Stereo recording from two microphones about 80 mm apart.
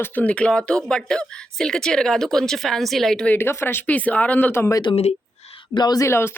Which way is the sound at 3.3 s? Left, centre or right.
Left.